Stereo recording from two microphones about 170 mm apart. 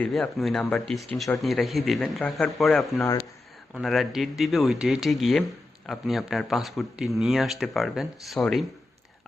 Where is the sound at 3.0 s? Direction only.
20° left (ahead or behind).